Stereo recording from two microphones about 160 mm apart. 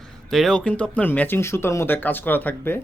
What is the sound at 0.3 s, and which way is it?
Speech, centre (ahead or behind).